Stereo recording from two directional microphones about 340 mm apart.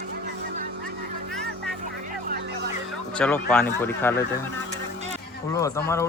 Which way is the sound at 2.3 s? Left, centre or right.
Right.